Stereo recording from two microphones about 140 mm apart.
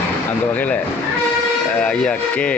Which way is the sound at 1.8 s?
5° left (ahead or behind).